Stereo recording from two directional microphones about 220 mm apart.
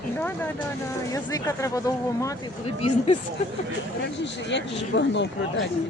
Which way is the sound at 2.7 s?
30° left (ahead or behind).